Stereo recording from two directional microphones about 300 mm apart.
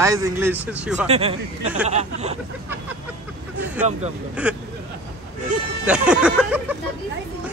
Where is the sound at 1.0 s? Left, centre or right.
Right.